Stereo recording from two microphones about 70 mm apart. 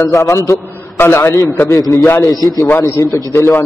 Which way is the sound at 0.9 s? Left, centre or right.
Left.